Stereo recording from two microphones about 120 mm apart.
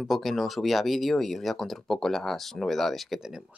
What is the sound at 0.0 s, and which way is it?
Speech, centre (ahead or behind).